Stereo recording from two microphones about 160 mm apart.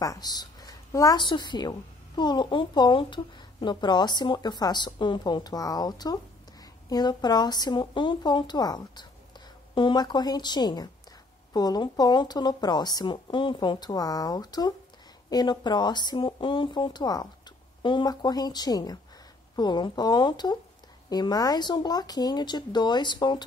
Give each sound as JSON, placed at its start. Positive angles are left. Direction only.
{"t": 0.0, "sound": "a woman's voice", "side_deg": 25}